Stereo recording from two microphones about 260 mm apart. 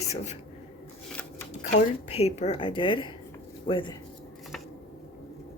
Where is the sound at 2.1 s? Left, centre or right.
Left.